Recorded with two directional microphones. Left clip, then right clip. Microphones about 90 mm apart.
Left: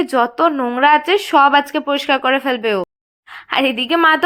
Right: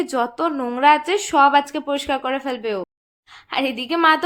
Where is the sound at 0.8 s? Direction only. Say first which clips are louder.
Left 3 dB; 35° left (ahead or behind).